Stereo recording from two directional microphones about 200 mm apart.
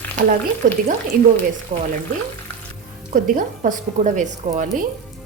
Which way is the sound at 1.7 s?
35° right (ahead or behind).